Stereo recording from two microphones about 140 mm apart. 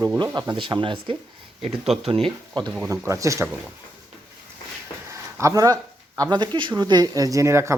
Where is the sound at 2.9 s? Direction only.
20° right (ahead or behind).